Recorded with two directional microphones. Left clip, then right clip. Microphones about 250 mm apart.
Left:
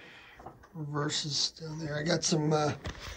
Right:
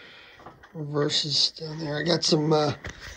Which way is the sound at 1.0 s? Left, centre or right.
Centre.